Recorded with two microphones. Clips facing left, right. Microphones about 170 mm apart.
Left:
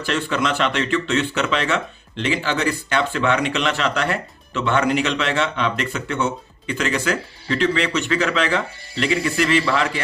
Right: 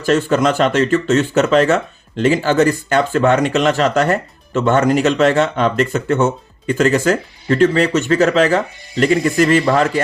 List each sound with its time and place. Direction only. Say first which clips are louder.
0.0 s speech: right 8 dB; 45° right (ahead or behind)